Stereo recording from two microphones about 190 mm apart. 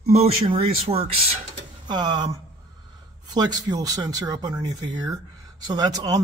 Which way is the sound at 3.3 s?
20° right (ahead or behind).